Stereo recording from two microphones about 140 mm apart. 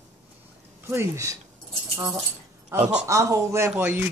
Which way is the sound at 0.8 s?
20° right (ahead or behind).